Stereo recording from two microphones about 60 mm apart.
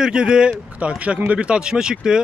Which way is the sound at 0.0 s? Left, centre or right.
Centre.